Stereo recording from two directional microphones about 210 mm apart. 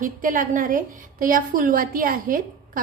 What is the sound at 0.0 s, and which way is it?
A woman's voice, 40° right (ahead or behind).